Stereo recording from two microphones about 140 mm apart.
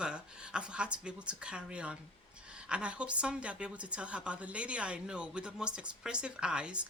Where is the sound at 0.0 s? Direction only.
5° right (ahead or behind).